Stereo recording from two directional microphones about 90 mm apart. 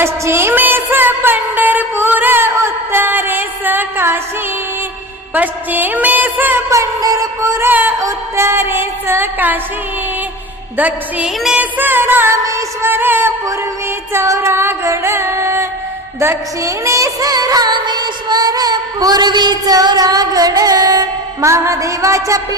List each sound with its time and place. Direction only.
0.0 s music: 30° right (ahead or behind)
5.3 s music: 20° right (ahead or behind)
6.7 s music: 35° right (ahead or behind)
7.7 s music: 20° right (ahead or behind)
7.9 s music: 35° right (ahead or behind)
10.8 s a woman's voice: 15° right (ahead or behind)
11.4 s music: 15° right (ahead or behind); by 21.5 s 45° right (ahead or behind)
21.5 s music: 35° right (ahead or behind)